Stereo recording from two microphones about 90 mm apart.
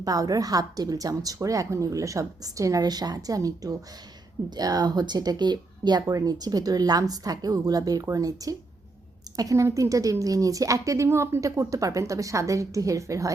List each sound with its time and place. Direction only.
0.0 s a woman's voice: 45° right (ahead or behind)